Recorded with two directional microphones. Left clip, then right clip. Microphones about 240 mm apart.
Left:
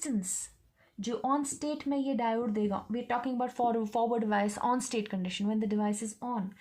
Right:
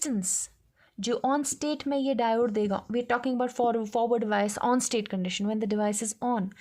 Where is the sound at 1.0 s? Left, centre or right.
Right.